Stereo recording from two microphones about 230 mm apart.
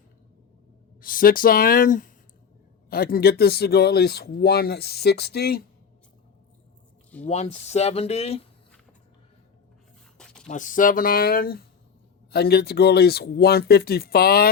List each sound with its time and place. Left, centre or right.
1.0 s speech: left
7.3 s speech: left
10.4 s speech: left